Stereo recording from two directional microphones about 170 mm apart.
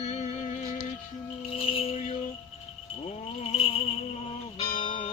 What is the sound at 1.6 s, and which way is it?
Music, 35° left (ahead or behind).